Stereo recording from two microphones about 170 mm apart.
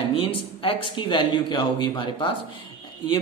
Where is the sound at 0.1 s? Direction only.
30° left (ahead or behind).